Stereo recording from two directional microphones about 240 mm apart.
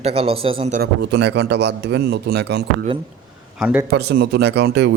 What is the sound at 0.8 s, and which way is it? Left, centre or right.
A man's voice, right.